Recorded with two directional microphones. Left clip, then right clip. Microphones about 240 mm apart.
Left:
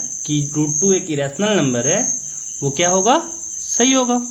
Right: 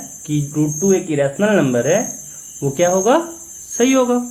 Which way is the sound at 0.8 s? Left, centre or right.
Centre.